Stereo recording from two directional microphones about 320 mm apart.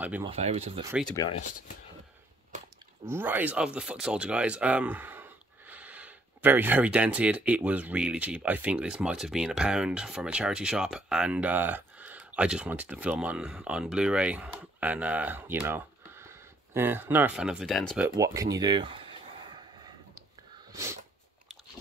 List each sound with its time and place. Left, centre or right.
0.0 s speech: centre
0.3 s speech: centre
1.0 s speech: centre
3.1 s speech: centre
20.7 s a sound: centre